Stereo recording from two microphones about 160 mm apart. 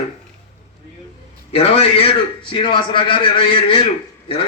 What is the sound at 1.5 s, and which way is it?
A man's voice, 35° left (ahead or behind).